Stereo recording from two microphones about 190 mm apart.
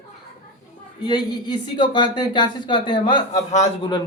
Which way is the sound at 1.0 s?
25° left (ahead or behind).